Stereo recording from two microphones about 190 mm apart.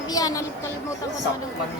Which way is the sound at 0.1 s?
20° left (ahead or behind).